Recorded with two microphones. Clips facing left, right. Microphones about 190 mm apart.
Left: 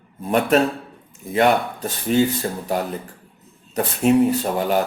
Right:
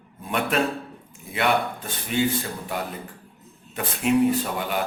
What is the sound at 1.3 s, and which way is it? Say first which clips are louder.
Speech: left 6 dB; 40° left (ahead or behind).